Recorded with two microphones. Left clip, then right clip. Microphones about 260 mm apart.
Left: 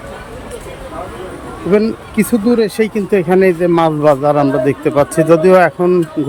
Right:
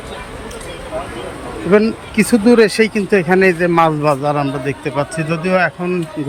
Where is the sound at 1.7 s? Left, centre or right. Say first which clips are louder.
Even; centre.